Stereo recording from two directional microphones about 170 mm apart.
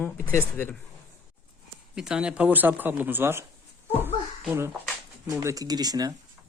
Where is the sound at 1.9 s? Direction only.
5° right (ahead or behind).